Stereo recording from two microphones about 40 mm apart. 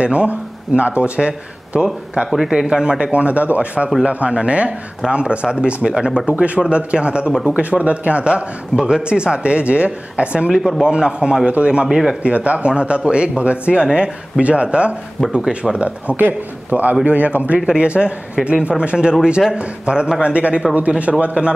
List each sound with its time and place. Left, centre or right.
0.0 s a man's voice: right
2.3 s speech: centre
3.1 s speech: right
6.2 s speech: right
7.8 s speech: right
11.9 s speech: centre
12.2 s speech: right
13.9 s speech: centre
15.4 s speech: centre
16.2 s a man's voice: right
17.6 s speech: right